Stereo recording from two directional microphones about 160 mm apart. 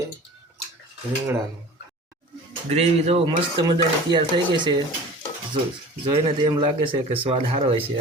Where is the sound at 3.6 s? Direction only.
30° right (ahead or behind).